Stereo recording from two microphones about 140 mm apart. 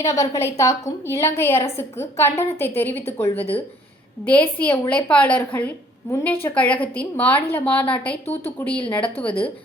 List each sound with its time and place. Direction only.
0.0 s a woman's voice: 20° left (ahead or behind)